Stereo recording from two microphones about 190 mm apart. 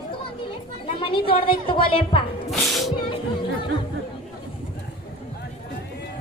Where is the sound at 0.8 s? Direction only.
30° left (ahead or behind).